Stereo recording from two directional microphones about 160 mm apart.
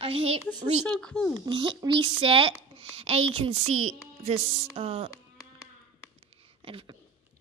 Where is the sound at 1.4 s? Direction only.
30° right (ahead or behind).